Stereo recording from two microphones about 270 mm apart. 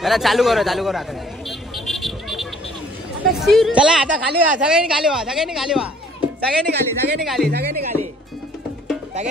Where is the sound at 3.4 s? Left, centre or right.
Centre.